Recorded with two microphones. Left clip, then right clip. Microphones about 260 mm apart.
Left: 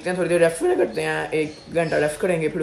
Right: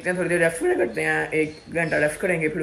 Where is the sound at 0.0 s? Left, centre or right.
Centre.